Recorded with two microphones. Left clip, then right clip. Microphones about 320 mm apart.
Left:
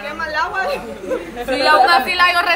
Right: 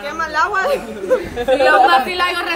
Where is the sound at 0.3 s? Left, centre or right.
Centre.